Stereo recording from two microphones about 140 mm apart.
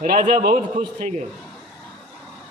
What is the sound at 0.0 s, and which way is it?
A man's voice, 70° right (ahead or behind).